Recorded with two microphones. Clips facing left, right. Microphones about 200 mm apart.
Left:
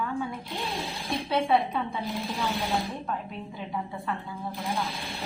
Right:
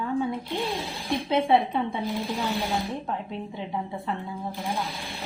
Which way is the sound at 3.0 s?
25° right (ahead or behind).